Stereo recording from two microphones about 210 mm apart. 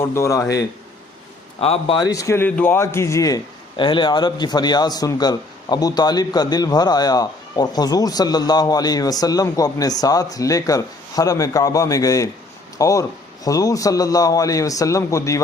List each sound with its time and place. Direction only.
0.0 s a man's voice: 15° left (ahead or behind)
1.5 s a man's voice: 30° left (ahead or behind)